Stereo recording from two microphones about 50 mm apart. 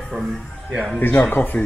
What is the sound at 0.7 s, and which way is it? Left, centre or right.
Speech, centre.